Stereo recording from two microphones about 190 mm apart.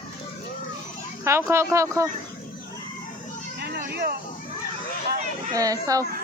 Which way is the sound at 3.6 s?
60° right (ahead or behind).